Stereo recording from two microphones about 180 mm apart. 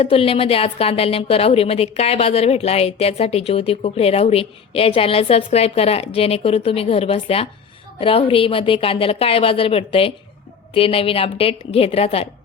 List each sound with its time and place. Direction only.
0.0 s a woman's voice: 30° left (ahead or behind)